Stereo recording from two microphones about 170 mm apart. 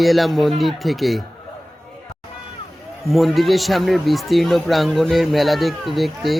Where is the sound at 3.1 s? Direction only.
Centre (ahead or behind).